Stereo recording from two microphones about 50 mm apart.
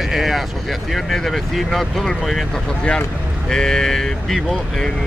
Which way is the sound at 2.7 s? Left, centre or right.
Centre.